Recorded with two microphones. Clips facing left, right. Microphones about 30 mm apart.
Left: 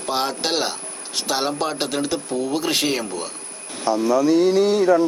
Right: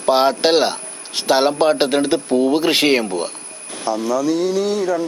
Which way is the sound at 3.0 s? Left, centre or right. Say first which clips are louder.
Right 6 dB; right.